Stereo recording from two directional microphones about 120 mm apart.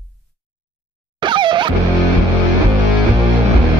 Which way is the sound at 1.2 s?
40° right (ahead or behind).